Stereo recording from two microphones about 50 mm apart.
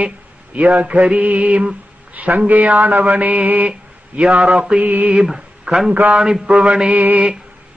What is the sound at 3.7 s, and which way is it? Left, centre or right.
Speech, right.